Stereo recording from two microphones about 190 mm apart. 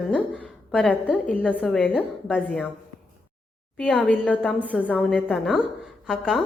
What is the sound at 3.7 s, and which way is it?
A woman's voice, 5° left (ahead or behind).